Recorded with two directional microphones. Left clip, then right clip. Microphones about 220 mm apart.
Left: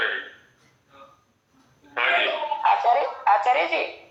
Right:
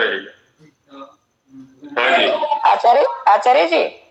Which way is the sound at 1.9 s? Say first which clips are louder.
Right 7 dB; 55° right (ahead or behind).